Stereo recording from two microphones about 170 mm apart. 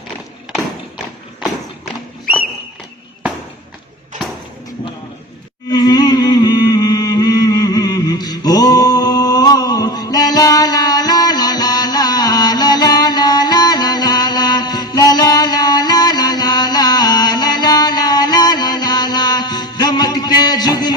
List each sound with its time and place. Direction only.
5.7 s music: 25° left (ahead or behind)